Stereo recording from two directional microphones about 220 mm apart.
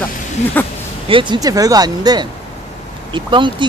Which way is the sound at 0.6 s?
10° left (ahead or behind).